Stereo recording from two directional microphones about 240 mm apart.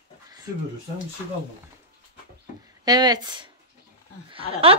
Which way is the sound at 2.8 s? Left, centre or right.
Centre.